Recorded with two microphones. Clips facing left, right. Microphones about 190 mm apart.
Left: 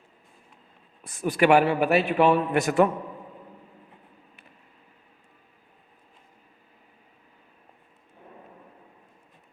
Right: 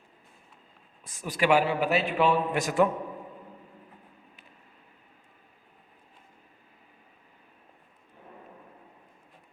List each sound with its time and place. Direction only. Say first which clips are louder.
1.0 s a man's voice: left 5 dB; 60° left (ahead or behind)